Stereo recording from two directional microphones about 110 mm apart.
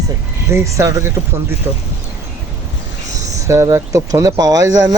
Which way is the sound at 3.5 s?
25° right (ahead or behind).